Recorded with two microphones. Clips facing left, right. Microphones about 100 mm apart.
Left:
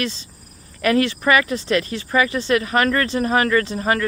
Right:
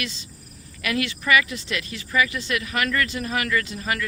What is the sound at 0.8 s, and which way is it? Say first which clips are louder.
Speech: left 8 dB; 40° left (ahead or behind).